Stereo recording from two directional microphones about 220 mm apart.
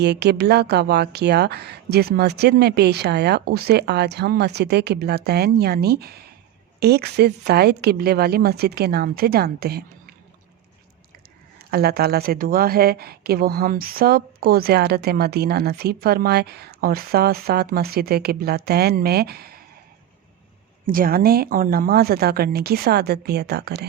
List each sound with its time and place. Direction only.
0.0 s a woman's voice: 50° right (ahead or behind)
11.7 s a woman's voice: 45° right (ahead or behind)
20.8 s a woman's voice: 40° right (ahead or behind)